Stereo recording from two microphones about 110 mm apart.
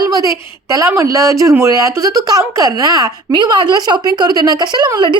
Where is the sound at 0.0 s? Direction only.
35° right (ahead or behind).